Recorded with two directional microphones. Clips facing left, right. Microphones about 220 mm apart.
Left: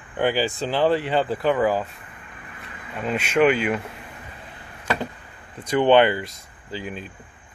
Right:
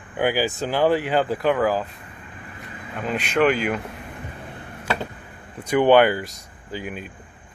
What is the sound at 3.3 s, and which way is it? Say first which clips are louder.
Speech: left 1 dB; centre (ahead or behind).